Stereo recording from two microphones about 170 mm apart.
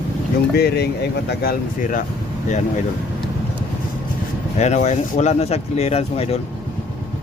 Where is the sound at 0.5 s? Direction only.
70° left (ahead or behind); by 2.0 s 55° left (ahead or behind).